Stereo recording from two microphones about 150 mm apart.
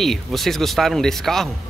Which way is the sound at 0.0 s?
Centre (ahead or behind).